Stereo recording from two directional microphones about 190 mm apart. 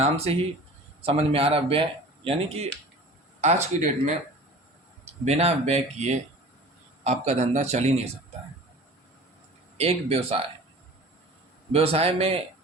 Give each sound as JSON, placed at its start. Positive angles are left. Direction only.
{"t": 0.0, "sound": "speech", "side_deg": -30}
{"t": 5.2, "sound": "speech", "side_deg": -35}
{"t": 9.7, "sound": "speech", "side_deg": -35}
{"t": 11.7, "sound": "speech", "side_deg": -30}